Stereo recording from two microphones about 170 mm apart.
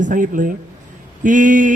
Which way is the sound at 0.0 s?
50° right (ahead or behind).